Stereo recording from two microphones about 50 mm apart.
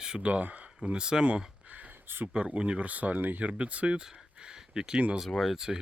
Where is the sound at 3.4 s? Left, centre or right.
Right.